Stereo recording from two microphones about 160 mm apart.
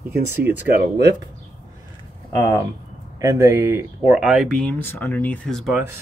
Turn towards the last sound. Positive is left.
turn(degrees=5)  # may be behind; listen again after turning